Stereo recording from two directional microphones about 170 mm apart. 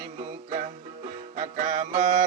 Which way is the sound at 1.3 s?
50° right (ahead or behind).